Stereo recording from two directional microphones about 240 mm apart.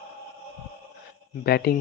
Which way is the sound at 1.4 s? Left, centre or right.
Left.